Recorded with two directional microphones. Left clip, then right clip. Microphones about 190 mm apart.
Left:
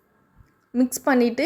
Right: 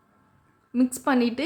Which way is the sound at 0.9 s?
15° left (ahead or behind).